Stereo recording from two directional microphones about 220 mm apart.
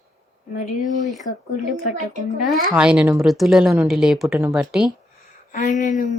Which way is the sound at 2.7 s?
5° right (ahead or behind).